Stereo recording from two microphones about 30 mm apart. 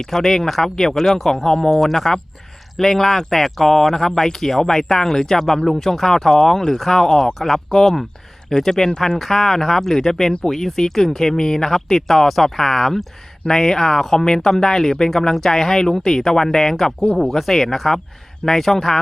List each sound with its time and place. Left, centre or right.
0.1 s speech: centre
1.5 s speech: left
1.8 s speech: centre